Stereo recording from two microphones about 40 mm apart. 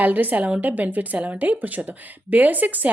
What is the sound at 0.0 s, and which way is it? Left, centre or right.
A woman's voice, right.